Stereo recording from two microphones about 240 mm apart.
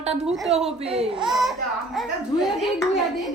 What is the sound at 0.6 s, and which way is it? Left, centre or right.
Speech, right.